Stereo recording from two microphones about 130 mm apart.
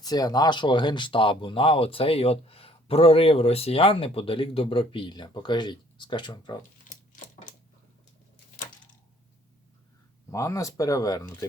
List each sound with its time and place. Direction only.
0.0 s speech: 30° left (ahead or behind)
6.6 s a sound: 80° left
10.3 s speech: 25° left (ahead or behind)